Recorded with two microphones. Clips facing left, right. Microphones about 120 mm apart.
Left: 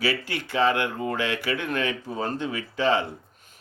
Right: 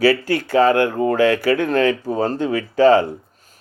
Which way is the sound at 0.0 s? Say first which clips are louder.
Right 11 dB; 40° right (ahead or behind).